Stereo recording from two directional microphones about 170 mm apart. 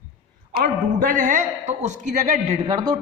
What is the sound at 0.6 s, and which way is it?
A man's voice, 55° right (ahead or behind).